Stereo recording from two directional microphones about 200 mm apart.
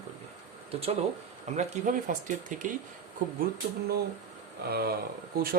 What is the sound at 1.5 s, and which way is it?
Speech, 40° right (ahead or behind).